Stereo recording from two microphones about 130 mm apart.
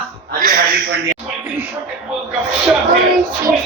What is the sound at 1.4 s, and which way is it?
Speech, 10° right (ahead or behind).